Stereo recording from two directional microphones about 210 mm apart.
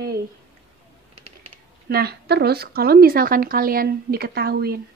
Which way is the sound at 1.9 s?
50° right (ahead or behind).